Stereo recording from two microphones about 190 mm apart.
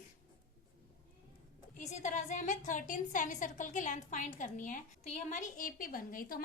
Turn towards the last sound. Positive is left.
turn(degrees=50)  # may be behind; listen again after turning